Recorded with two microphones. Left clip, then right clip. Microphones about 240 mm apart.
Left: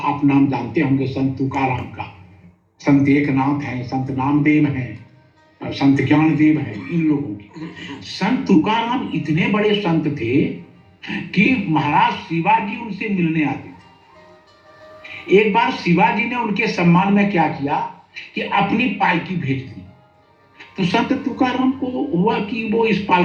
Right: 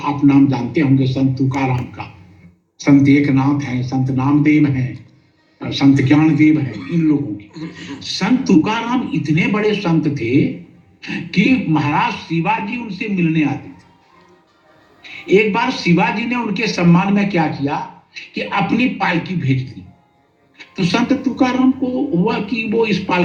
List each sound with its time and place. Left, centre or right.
0.0 s a man's voice: right
15.1 s a man's voice: right